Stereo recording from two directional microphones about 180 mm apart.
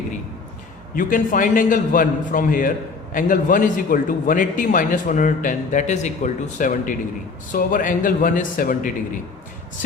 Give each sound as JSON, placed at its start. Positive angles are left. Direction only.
{"t": 0.9, "sound": "a man's voice", "side_deg": 50}